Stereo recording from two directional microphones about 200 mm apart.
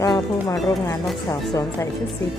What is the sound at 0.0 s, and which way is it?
Speech, 15° left (ahead or behind).